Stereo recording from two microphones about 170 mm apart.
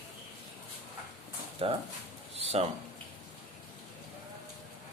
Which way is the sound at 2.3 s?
40° right (ahead or behind).